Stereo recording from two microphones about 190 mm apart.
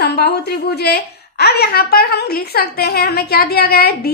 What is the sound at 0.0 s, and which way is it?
A woman's voice, 60° left (ahead or behind).